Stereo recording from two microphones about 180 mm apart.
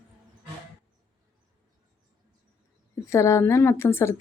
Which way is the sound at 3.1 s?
15° left (ahead or behind).